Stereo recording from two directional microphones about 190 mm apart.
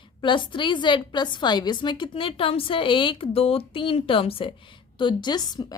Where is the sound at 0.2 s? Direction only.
25° left (ahead or behind).